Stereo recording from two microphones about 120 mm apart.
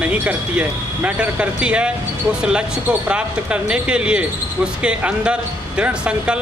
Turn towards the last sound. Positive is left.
turn(degrees=-10)  # may be behind; listen again after turning